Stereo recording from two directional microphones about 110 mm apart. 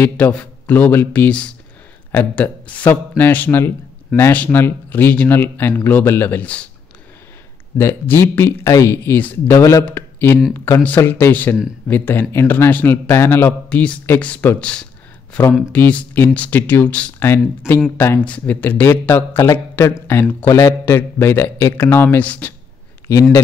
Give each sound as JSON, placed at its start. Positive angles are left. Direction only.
{"t": 0.0, "sound": "a man's voice", "side_deg": 15}
{"t": 7.7, "sound": "a man's voice", "side_deg": 20}